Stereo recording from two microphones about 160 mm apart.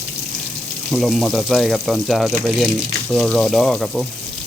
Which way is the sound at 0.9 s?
Centre (ahead or behind).